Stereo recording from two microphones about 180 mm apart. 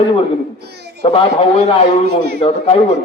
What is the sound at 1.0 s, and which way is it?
A man's voice, 30° left (ahead or behind).